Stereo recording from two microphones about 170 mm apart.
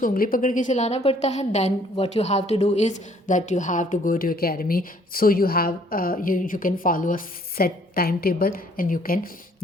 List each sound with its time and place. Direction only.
0.0 s a woman's voice: 55° left (ahead or behind)